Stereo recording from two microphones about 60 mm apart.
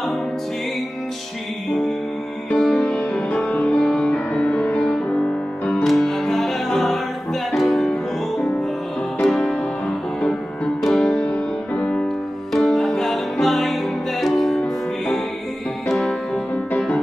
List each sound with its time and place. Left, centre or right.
2.5 s music: centre; by 3.8 s left
3.8 s music: centre
5.9 s music: centre
9.2 s music: centre
10.8 s music: centre
11.1 s music: left
12.5 s music: centre